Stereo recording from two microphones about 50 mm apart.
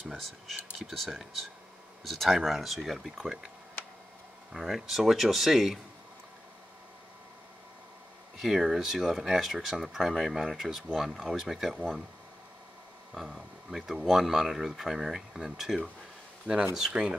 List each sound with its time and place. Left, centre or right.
0.0 s speech: centre
4.5 s speech: centre
8.4 s speech: centre
13.1 s speech: centre